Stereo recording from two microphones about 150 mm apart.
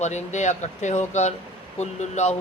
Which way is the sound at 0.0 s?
50° left (ahead or behind).